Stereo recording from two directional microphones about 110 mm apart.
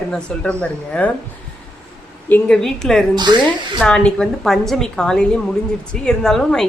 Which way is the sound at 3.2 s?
40° right (ahead or behind).